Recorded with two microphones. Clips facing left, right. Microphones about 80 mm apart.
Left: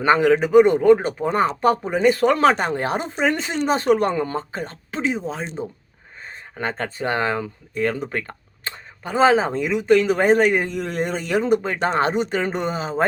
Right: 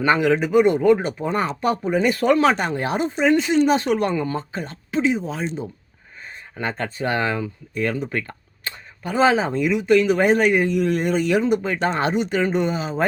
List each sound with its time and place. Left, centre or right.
0.0 s speech: left